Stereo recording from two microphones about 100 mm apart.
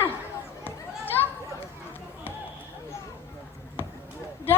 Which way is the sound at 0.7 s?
20° left (ahead or behind).